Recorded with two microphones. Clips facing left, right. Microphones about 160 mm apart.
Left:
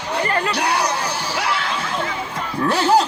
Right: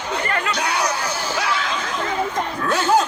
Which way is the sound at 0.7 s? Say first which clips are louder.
Left 2 dB; 30° left (ahead or behind).